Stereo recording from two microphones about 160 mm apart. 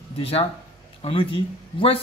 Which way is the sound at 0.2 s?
35° left (ahead or behind).